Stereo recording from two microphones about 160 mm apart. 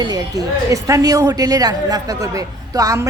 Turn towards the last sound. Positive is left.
turn(degrees=-20)  # may be behind; listen again after turning